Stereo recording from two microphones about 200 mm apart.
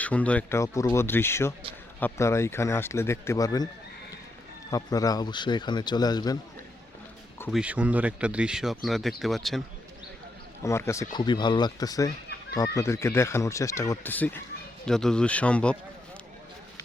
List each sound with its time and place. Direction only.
0.0 s speech: 5° left (ahead or behind)
4.7 s a man's voice: 20° left (ahead or behind)
7.5 s speech: 5° right (ahead or behind)
10.6 s speech: 15° left (ahead or behind)